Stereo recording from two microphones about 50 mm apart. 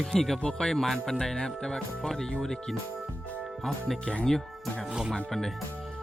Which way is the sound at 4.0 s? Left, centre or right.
Left.